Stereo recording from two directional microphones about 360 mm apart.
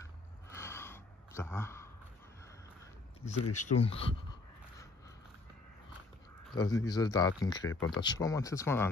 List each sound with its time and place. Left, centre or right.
0.6 s gasp: centre
2.4 s a sound: centre
3.5 s speech: centre
6.5 s speech: centre